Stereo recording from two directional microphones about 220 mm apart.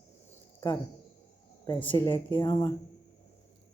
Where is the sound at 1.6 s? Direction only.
15° left (ahead or behind).